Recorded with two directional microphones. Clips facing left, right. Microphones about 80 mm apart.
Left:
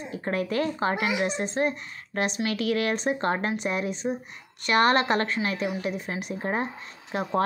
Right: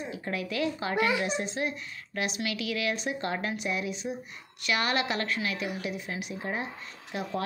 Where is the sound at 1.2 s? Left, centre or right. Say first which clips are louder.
Left 5 dB; left.